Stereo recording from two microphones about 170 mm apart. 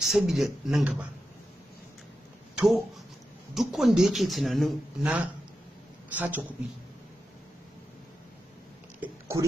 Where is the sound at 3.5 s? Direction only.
Centre (ahead or behind).